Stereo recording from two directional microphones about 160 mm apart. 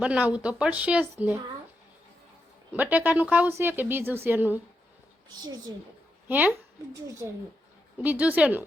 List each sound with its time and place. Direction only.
0.0 s a woman's voice: 10° right (ahead or behind)
2.7 s a woman's voice: 10° right (ahead or behind)
5.3 s a woman's voice: 25° right (ahead or behind)
6.2 s a woman's voice: 10° right (ahead or behind)